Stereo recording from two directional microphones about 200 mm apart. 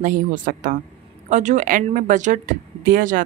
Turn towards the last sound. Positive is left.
turn(degrees=-45)  # may be behind; listen again after turning